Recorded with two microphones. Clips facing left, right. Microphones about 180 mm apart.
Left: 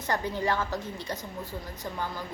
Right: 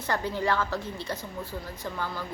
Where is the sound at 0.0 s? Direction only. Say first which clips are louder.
Right 1 dB; 15° left (ahead or behind).